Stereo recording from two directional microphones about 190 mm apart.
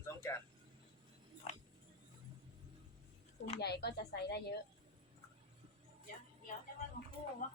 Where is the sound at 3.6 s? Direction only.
60° left (ahead or behind).